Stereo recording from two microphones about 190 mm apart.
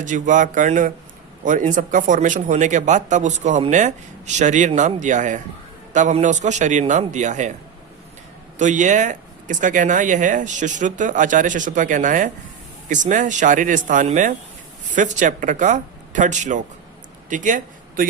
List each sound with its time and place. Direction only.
0.0 s speech: 40° right (ahead or behind)
8.5 s speech: 40° right (ahead or behind)
17.2 s a sound: 45° right (ahead or behind)